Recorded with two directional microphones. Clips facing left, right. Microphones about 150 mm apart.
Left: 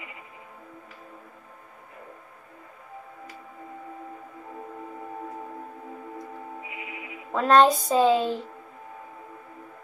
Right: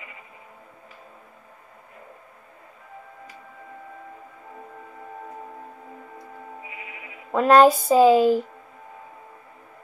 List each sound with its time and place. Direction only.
6.6 s music: 20° left (ahead or behind)
7.3 s speech: 5° right (ahead or behind)